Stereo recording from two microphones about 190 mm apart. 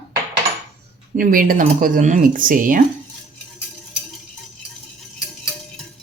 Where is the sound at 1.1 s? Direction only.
45° right (ahead or behind).